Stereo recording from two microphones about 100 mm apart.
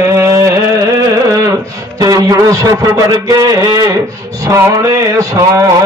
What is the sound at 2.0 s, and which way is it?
Music, 35° right (ahead or behind).